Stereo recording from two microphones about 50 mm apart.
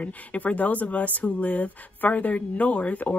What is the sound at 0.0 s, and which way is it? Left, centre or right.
Speech, left.